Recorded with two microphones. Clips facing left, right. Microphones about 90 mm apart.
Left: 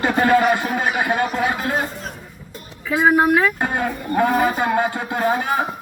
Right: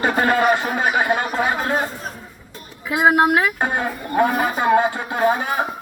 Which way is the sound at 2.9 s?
15° right (ahead or behind).